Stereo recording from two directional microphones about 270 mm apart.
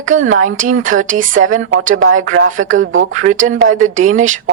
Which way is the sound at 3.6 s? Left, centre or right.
Right.